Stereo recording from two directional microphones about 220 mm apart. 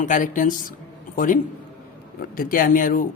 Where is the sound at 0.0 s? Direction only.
35° left (ahead or behind).